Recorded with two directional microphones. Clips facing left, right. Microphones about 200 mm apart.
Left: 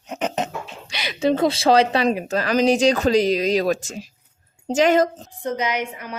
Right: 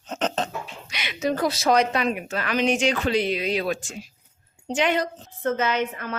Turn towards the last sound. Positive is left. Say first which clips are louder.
# right 1 dB
turn(degrees=15)  # may be behind; listen again after turning